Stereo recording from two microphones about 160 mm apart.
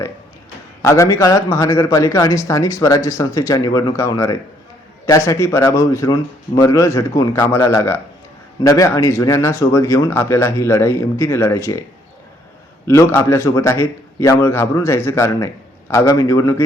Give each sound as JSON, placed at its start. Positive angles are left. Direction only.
{"t": 0.8, "sound": "a man's voice", "side_deg": 20}
{"t": 12.9, "sound": "a man's voice", "side_deg": 15}